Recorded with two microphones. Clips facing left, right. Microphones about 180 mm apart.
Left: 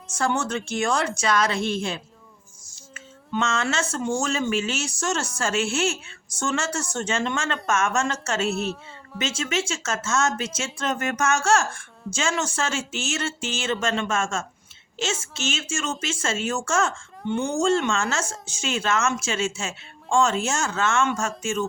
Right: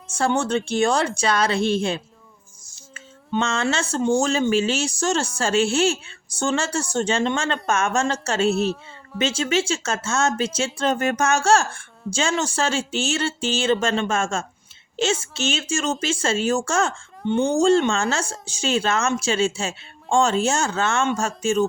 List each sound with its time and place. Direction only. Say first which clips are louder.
0.1 s speech: right 4 dB; 30° right (ahead or behind)
8.4 s a woman's voice: right 6 dB; centre (ahead or behind)
9.1 s speech: right 5 dB; 30° right (ahead or behind)